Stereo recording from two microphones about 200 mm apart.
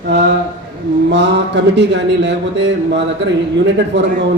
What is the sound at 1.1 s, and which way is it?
Speech, 60° right (ahead or behind).